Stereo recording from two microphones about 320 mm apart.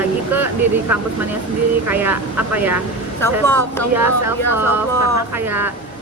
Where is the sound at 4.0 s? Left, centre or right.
Centre.